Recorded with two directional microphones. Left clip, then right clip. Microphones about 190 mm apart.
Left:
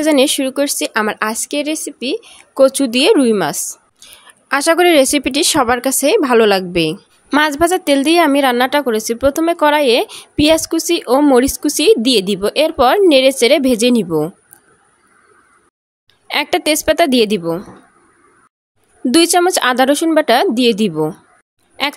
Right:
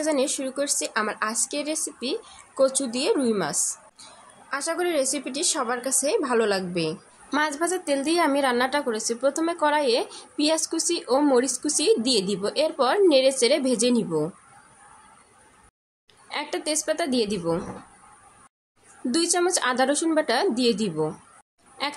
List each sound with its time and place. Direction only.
0.0 s a woman's voice: 50° left (ahead or behind)
16.3 s a woman's voice: 45° left (ahead or behind)
19.0 s a woman's voice: 45° left (ahead or behind)